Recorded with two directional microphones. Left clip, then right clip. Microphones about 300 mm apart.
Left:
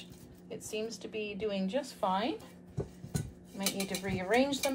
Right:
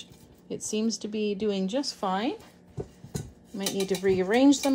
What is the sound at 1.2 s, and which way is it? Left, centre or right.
A woman's voice, right.